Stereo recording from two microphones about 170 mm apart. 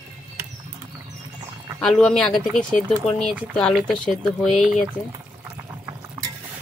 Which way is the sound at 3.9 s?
Centre (ahead or behind).